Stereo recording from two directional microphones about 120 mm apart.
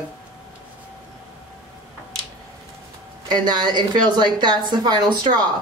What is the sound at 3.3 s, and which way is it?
A woman's voice, 35° right (ahead or behind).